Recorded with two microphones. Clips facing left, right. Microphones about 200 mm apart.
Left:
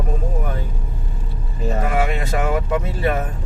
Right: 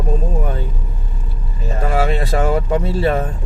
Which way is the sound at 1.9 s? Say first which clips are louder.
Right 7 dB; 30° right (ahead or behind).